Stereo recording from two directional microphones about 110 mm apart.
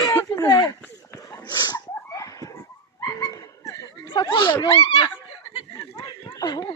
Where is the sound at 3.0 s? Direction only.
30° left (ahead or behind).